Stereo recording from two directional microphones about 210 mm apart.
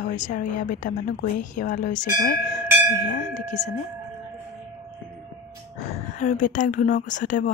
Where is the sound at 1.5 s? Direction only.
40° left (ahead or behind).